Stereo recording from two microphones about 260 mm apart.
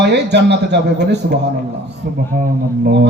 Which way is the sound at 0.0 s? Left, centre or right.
Right.